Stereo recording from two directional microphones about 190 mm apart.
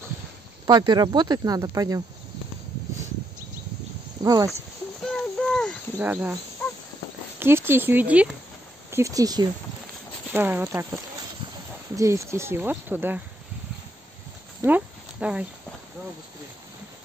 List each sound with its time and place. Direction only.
0.7 s speech: 20° right (ahead or behind)
4.2 s speech: 20° right (ahead or behind)
5.0 s a sound: 5° left (ahead or behind)
5.9 s speech: 10° right (ahead or behind)
7.3 s speech: 10° right (ahead or behind)
11.9 s speech: 15° right (ahead or behind)
14.6 s a sound: 10° right (ahead or behind)